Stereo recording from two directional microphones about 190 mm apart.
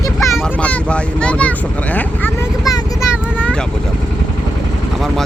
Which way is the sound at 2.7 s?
20° left (ahead or behind).